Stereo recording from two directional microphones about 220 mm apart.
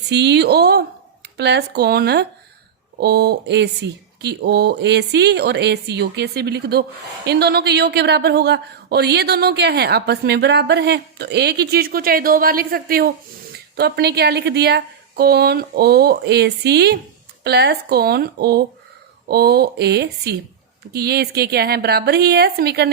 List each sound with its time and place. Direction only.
0.1 s a woman's voice: 50° right (ahead or behind)